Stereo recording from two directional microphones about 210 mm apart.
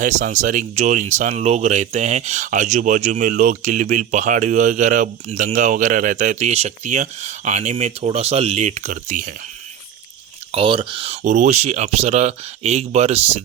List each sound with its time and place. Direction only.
0.0 s speech: 35° right (ahead or behind)
10.5 s speech: 25° right (ahead or behind)